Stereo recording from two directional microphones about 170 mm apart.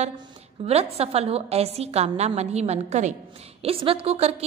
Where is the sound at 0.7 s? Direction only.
35° right (ahead or behind).